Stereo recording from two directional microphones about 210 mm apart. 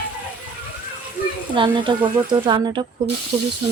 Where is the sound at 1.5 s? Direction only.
25° right (ahead or behind).